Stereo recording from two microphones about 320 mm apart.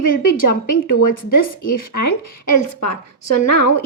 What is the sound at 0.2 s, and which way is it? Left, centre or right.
A woman's voice, left.